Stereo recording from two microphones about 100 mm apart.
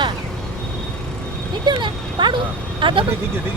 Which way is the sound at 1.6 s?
50° right (ahead or behind).